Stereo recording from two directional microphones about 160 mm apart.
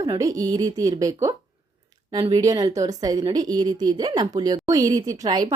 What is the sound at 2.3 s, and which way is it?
A woman's voice, 25° right (ahead or behind).